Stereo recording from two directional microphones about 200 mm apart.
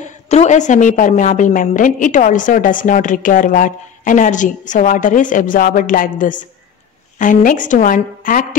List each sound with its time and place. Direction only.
0.3 s a woman's voice: 35° left (ahead or behind)